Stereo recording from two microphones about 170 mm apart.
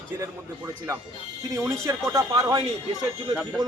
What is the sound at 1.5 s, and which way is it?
A man's voice, 15° right (ahead or behind).